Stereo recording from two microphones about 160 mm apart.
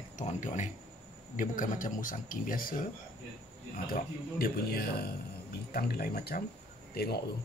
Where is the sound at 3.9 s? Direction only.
70° left (ahead or behind).